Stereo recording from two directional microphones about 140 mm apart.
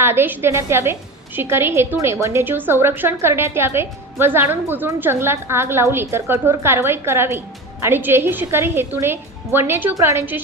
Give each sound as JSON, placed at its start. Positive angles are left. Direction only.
{"t": 0.0, "sound": "a woman's voice", "side_deg": -15}